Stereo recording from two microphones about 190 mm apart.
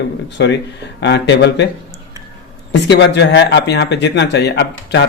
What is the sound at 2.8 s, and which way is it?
Speech, 65° left (ahead or behind).